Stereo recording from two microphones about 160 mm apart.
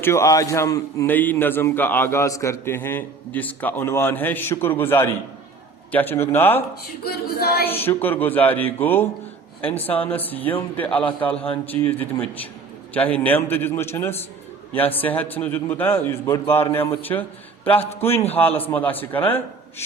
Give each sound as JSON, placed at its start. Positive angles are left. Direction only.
{"t": 0.0, "sound": "a man's voice", "side_deg": 15}
{"t": 7.0, "sound": "a sound", "side_deg": 75}
{"t": 7.7, "sound": "a man's voice", "side_deg": 15}